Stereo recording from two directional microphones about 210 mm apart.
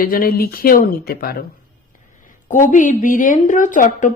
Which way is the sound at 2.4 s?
35° left (ahead or behind).